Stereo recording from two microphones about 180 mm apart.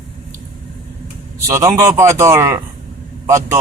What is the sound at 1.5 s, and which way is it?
Speech, 15° right (ahead or behind).